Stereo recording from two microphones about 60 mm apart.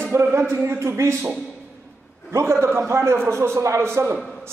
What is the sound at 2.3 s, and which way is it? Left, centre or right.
A man's voice, right.